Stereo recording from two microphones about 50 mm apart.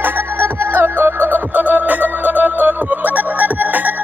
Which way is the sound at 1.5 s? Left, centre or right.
Right.